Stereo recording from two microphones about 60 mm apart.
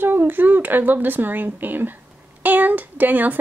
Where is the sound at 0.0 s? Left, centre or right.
Right.